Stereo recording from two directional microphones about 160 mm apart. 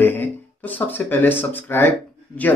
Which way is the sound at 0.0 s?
10° left (ahead or behind).